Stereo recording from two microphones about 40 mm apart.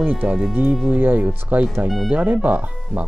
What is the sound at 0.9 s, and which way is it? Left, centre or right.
Speech, right.